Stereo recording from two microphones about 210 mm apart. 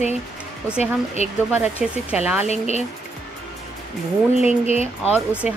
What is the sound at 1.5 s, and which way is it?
Speech, 10° right (ahead or behind).